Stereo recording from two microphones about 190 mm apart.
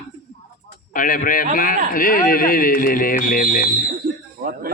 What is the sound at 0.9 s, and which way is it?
A man's voice, 45° left (ahead or behind).